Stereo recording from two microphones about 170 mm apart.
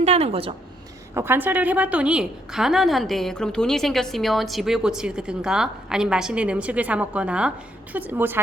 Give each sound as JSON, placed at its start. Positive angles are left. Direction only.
{"t": 0.0, "sound": "a woman's voice", "side_deg": -40}
{"t": 1.1, "sound": "a woman's voice", "side_deg": -15}